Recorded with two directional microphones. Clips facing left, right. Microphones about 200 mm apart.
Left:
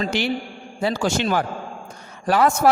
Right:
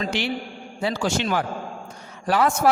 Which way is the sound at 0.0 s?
40° left (ahead or behind).